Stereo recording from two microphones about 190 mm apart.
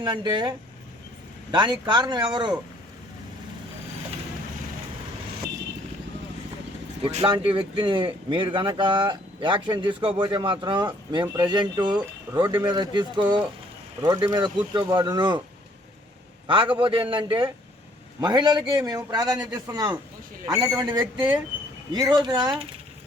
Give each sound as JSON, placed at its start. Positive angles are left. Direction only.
{"t": 0.0, "sound": "speech", "side_deg": -25}
{"t": 1.5, "sound": "speech", "side_deg": -25}
{"t": 7.0, "sound": "speech", "side_deg": -25}
{"t": 16.5, "sound": "speech", "side_deg": -25}